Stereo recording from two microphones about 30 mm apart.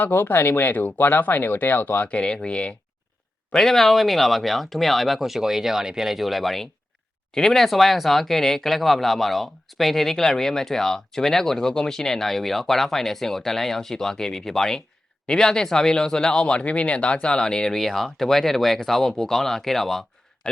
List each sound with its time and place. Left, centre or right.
0.7 s speech: left
2.2 s speech: left
3.5 s speech: centre; by 16.6 s left
16.6 s speech: left
17.7 s speech: centre